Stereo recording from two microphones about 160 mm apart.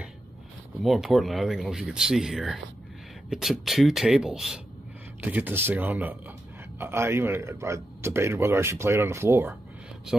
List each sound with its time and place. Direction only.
0.8 s a man's voice: centre (ahead or behind)